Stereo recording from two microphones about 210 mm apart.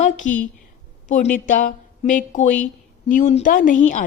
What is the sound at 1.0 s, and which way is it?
A woman's voice, 35° left (ahead or behind).